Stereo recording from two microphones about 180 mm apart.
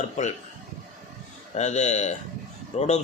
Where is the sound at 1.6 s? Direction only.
40° left (ahead or behind).